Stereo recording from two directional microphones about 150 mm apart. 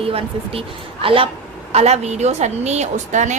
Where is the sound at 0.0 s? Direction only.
40° right (ahead or behind).